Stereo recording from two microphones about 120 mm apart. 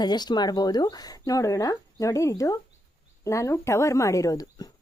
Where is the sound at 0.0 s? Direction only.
35° left (ahead or behind).